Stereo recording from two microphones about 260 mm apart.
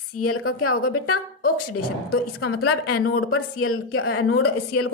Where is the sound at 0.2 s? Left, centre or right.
Left.